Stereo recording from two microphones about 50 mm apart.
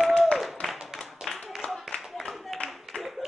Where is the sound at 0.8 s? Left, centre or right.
Centre.